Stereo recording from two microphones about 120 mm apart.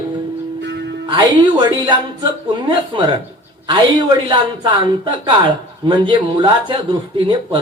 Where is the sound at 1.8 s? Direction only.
40° right (ahead or behind).